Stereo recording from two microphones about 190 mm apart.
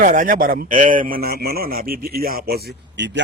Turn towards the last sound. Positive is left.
turn(degrees=-65)  # may be behind; listen again after turning